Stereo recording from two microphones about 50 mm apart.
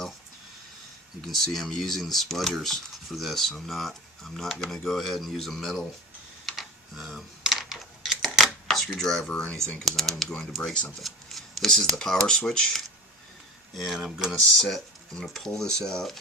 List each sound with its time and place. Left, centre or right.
1.2 s speech: centre
6.4 s computer keyboard: centre
7.4 s coin: centre
8.6 s a sound: centre
9.0 s speech: centre
9.8 s speech: centre
10.6 s speech: centre
11.0 s speech: centre
13.7 s speech: centre
14.3 s speech: centre